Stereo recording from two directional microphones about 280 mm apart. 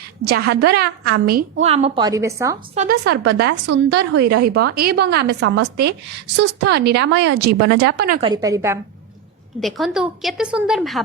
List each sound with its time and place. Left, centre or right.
0.2 s a woman's voice: right; by 2.6 s centre
2.7 s a woman's voice: right
8.2 s a woman's voice: centre
9.6 s a woman's voice: centre